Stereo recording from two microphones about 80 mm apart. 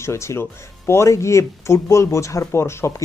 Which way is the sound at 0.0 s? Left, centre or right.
Left.